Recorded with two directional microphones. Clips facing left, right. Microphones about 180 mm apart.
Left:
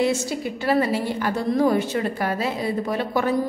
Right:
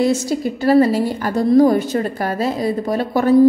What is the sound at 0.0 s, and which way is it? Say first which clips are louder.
A woman's voice: right 5 dB; 40° right (ahead or behind).